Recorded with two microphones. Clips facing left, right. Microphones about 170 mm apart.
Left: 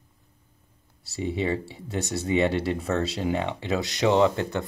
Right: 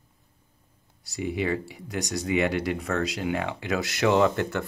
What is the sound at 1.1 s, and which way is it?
Speech, 30° left (ahead or behind).